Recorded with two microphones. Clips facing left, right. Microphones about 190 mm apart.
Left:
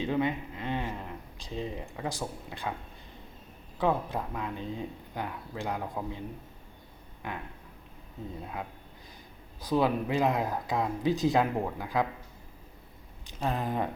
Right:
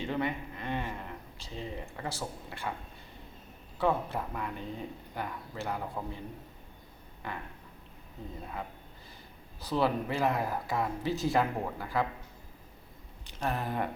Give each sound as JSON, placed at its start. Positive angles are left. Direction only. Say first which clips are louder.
{"t": 0.0, "sound": "speech", "louder": "left 4 dB", "side_deg": 20}
{"t": 3.8, "sound": "speech", "louder": "left 1 dB", "side_deg": 15}
{"t": 9.6, "sound": "speech", "louder": "left 2 dB", "side_deg": 15}
{"t": 13.2, "sound": "speech", "louder": "left 2 dB", "side_deg": 15}